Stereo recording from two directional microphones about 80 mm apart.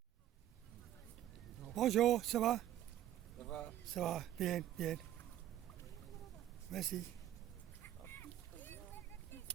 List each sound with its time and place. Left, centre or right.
1.6 s speech: centre
3.3 s a sound: centre
3.9 s speech: centre
6.7 s speech: centre
8.0 s boat: left